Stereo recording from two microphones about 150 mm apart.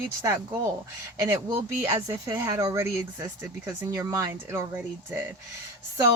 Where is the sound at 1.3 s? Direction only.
15° right (ahead or behind).